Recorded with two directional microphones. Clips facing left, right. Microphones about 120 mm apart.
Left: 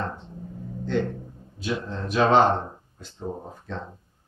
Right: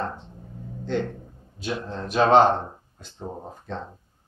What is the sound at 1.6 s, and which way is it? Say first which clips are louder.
Speech: left 1 dB; 30° right (ahead or behind).